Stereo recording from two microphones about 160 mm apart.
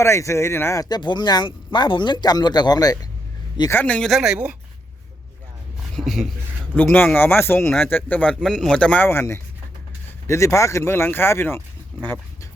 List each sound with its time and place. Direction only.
0.0 s speech: 15° left (ahead or behind)
3.7 s speech: 10° left (ahead or behind); by 4.5 s 5° right (ahead or behind)
5.9 s speech: centre (ahead or behind)
6.9 s speech: 10° left (ahead or behind)
8.4 s speech: centre (ahead or behind); by 11.6 s 15° left (ahead or behind)